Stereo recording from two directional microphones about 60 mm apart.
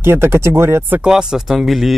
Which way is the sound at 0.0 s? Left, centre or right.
Right.